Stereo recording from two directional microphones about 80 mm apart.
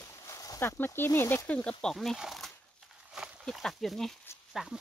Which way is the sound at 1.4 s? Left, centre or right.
Centre.